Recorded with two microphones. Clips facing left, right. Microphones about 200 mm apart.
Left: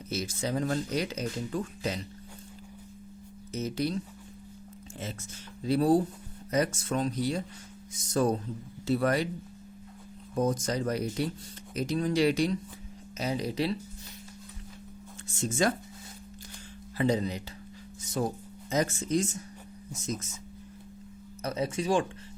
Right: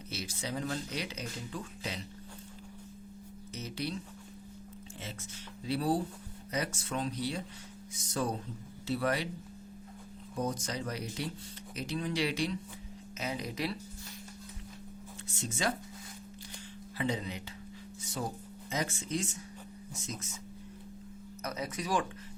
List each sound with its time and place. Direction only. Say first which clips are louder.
0.1 s speech: left 7 dB; 45° left (ahead or behind)
3.5 s speech: left 8 dB; 45° left (ahead or behind)
5.6 s speech: left 7 dB; 45° left (ahead or behind)
10.5 s speech: left 7 dB; 45° left (ahead or behind)
15.4 s speech: left 7 dB; 45° left (ahead or behind)
17.0 s speech: left 7 dB; 40° left (ahead or behind)
18.7 s speech: left 7 dB; 45° left (ahead or behind)
21.4 s speech: left 7 dB; 30° left (ahead or behind)